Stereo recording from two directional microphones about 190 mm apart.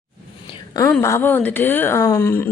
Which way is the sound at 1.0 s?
10° left (ahead or behind).